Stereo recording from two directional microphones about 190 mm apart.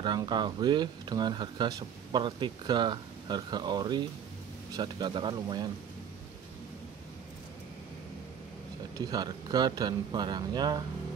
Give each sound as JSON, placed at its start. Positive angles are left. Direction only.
{"t": 0.0, "sound": "speech", "side_deg": -20}
{"t": 8.9, "sound": "speech", "side_deg": -20}